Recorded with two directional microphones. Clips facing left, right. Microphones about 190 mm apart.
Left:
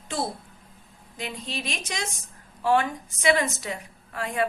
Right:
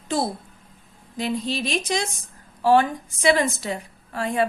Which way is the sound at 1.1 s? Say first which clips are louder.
Right 8 dB; 35° right (ahead or behind).